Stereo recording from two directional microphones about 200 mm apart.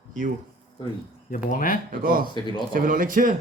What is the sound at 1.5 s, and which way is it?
Speech, 45° left (ahead or behind).